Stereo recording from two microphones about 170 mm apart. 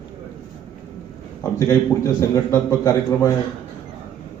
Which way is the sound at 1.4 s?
20° left (ahead or behind).